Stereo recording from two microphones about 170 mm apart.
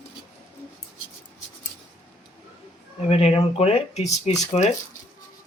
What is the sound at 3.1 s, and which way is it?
Speech, 35° left (ahead or behind).